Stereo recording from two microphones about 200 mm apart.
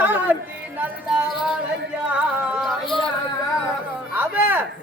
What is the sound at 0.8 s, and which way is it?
Music, centre (ahead or behind).